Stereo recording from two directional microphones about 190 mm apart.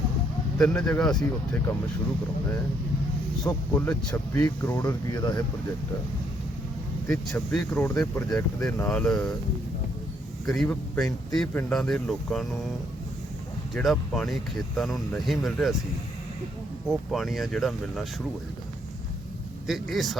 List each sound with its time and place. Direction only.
0.6 s speech: 5° left (ahead or behind)
3.4 s speech: 10° left (ahead or behind)
7.1 s speech: 5° left (ahead or behind)
10.4 s speech: centre (ahead or behind)
13.7 s speech: centre (ahead or behind)
16.9 s speech: centre (ahead or behind)
19.6 s speech: centre (ahead or behind)